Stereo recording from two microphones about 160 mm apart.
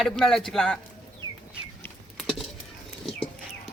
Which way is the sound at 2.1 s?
Centre (ahead or behind).